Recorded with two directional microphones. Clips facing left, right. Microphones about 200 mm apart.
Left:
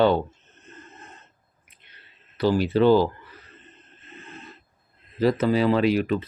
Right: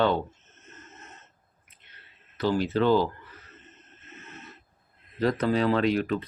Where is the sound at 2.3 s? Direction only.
10° left (ahead or behind).